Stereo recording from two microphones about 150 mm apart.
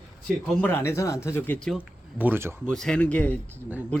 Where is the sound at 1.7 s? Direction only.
10° right (ahead or behind).